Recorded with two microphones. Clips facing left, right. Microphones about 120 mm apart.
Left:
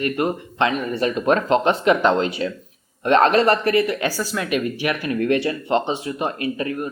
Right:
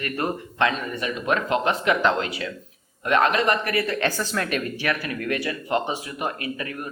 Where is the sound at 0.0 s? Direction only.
20° left (ahead or behind).